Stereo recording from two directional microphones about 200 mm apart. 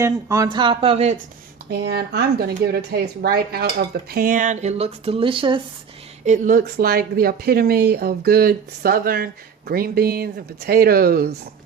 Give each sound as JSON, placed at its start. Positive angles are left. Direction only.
{"t": 0.0, "sound": "speech", "side_deg": -15}
{"t": 1.7, "sound": "speech", "side_deg": -55}
{"t": 6.2, "sound": "speech", "side_deg": -40}